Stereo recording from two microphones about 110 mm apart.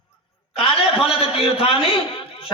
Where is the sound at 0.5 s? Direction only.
60° left (ahead or behind).